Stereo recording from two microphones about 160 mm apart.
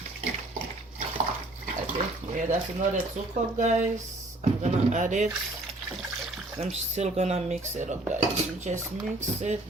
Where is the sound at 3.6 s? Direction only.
50° right (ahead or behind).